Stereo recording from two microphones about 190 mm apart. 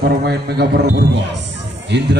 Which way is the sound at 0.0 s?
55° right (ahead or behind).